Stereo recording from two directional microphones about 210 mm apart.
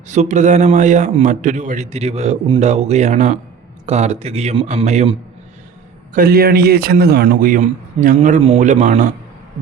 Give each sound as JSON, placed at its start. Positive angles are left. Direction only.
{"t": 0.1, "sound": "a man's voice", "side_deg": -35}
{"t": 6.1, "sound": "a man's voice", "side_deg": -45}